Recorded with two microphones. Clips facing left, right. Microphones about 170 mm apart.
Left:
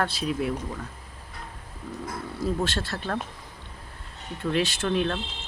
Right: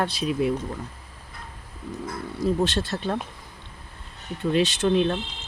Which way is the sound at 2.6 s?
20° right (ahead or behind).